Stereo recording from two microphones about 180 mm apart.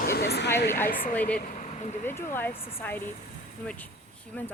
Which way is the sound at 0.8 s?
55° left (ahead or behind).